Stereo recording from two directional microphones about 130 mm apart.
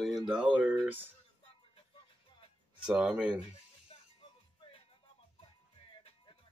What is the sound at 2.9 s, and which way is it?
Speech, 5° right (ahead or behind).